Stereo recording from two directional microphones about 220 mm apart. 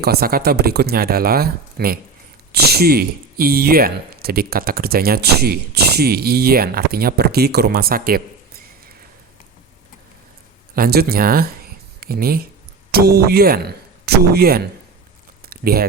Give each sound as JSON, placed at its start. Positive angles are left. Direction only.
{"t": 0.0, "sound": "speech", "side_deg": -45}
{"t": 10.8, "sound": "speech", "side_deg": -45}
{"t": 15.4, "sound": "a sound", "side_deg": -45}